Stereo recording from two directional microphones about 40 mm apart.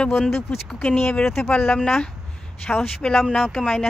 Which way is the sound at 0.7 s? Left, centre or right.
Left.